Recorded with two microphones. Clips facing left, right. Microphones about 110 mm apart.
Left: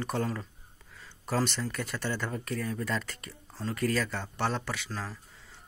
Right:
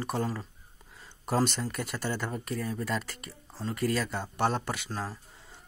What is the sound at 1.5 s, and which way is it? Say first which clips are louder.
Speech: even; 15° right (ahead or behind).